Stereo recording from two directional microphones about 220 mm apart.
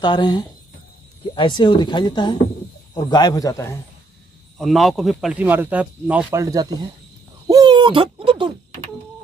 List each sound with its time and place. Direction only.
0.0 s a man's voice: 20° left (ahead or behind)
4.6 s speech: centre (ahead or behind); by 6.9 s 15° right (ahead or behind)
7.4 s owl: 20° right (ahead or behind)